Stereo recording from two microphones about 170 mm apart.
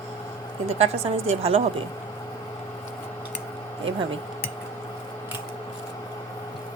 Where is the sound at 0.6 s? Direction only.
35° right (ahead or behind).